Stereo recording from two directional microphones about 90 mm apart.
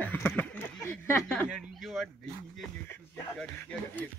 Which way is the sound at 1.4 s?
5° right (ahead or behind).